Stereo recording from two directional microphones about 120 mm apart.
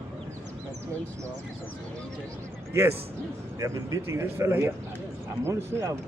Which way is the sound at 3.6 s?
25° right (ahead or behind).